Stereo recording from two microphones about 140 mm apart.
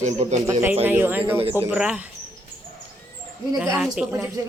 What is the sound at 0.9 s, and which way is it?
Speech, 15° right (ahead or behind).